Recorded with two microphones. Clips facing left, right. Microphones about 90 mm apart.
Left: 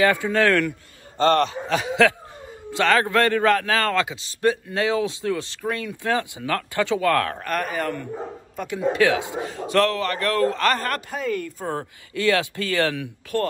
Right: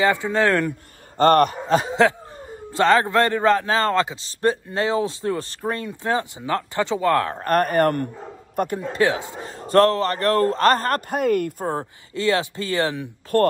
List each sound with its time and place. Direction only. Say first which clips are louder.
0.0 s a man's voice: even; 20° right (ahead or behind)
1.1 s speech: right 3 dB; 50° right (ahead or behind)
2.8 s a man's voice: right 2 dB; 20° right (ahead or behind)
7.4 s a man's voice: right 7 dB; 50° right (ahead or behind)
8.5 s speech: right 6 dB; 45° right (ahead or behind)
8.9 s a man's voice: even; 25° right (ahead or behind)
9.7 s speech: right 5 dB; 40° right (ahead or behind)
11.1 s a man's voice: right 6 dB; 60° right (ahead or behind)
11.6 s a man's voice: right 3 dB; 25° right (ahead or behind)
13.3 s speech: right 6 dB; 50° right (ahead or behind)